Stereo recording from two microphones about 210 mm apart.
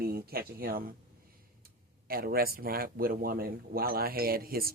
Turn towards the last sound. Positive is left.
turn(degrees=-45)  # may be behind; listen again after turning